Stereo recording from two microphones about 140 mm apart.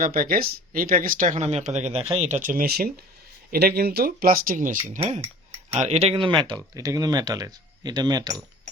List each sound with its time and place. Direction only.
0.0 s speech: 90° right
1.4 s speech: 50° right (ahead or behind); by 4.9 s 65° right (ahead or behind)
4.9 s speech: 50° right (ahead or behind)
6.7 s speech: 25° right (ahead or behind)